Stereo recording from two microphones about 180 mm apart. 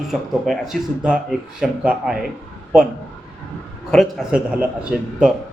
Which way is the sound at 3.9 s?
Centre (ahead or behind).